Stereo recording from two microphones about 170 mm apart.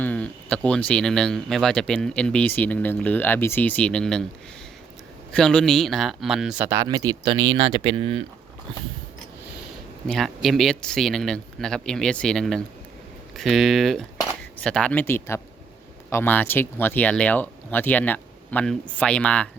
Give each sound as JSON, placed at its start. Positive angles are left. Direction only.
{"t": 0.0, "sound": "speech", "side_deg": 10}
{"t": 5.3, "sound": "speech", "side_deg": 5}
{"t": 6.7, "sound": "speech", "side_deg": -20}
{"t": 10.1, "sound": "speech", "side_deg": 0}